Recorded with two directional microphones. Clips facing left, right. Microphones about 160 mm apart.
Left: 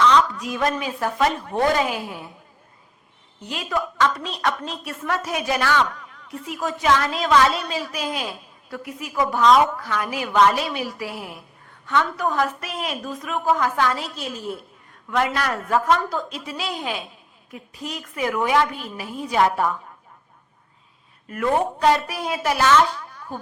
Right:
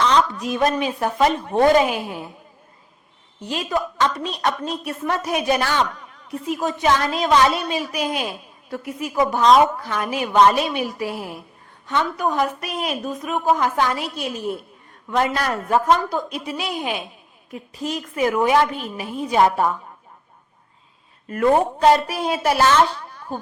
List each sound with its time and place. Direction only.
0.3 s a woman's voice: 25° right (ahead or behind)
3.5 s a woman's voice: 25° right (ahead or behind)
15.1 s a woman's voice: 35° right (ahead or behind)
21.2 s a woman's voice: 35° right (ahead or behind)